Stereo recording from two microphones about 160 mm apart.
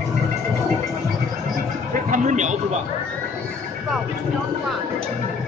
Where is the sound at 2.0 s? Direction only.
50° right (ahead or behind).